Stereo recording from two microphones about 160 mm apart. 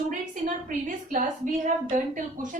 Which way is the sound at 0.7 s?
55° right (ahead or behind).